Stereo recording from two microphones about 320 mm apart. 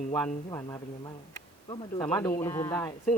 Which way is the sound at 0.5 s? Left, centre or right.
Centre.